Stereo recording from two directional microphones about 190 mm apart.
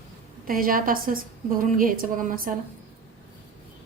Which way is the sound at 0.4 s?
50° right (ahead or behind).